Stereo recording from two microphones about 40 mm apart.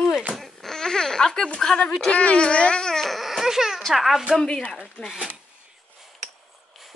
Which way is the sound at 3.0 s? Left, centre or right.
Centre.